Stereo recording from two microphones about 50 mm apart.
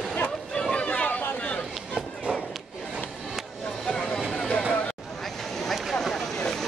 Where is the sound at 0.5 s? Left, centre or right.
Centre.